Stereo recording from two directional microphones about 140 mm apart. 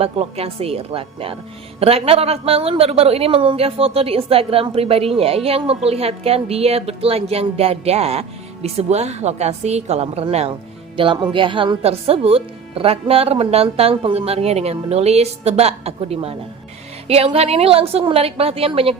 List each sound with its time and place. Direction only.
0.0 s a woman's voice: 45° right (ahead or behind)